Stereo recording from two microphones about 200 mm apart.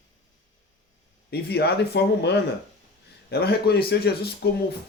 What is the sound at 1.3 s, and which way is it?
Speech, 55° left (ahead or behind).